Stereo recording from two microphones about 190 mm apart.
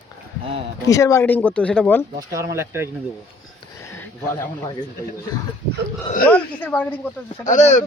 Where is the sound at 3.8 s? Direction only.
15° left (ahead or behind).